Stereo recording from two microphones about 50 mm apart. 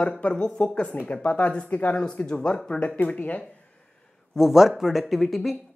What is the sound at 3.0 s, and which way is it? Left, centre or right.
Speech, left.